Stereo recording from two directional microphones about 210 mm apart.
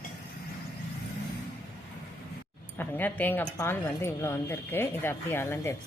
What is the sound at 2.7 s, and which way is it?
Speech, 10° left (ahead or behind).